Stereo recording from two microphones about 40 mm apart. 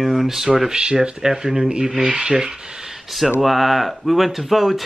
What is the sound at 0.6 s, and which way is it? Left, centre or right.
Speech, centre.